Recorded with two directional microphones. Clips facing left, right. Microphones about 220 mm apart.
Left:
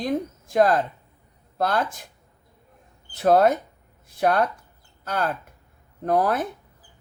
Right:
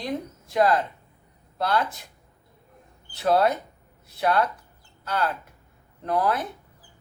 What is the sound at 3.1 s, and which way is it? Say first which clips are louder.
A man's voice: left 4 dB; 45° left (ahead or behind).